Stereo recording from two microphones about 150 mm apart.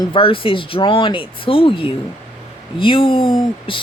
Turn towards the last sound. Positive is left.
turn(degrees=35)  # may be behind; listen again after turning